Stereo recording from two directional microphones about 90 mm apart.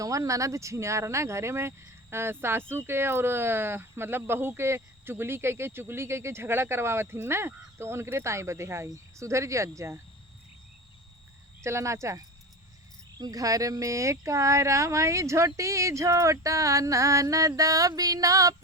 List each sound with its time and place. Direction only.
0.0 s speech: 35° right (ahead or behind)
11.6 s speech: 30° right (ahead or behind)
13.1 s speech: 45° right (ahead or behind)